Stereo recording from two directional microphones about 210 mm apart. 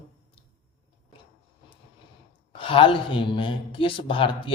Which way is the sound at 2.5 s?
25° left (ahead or behind).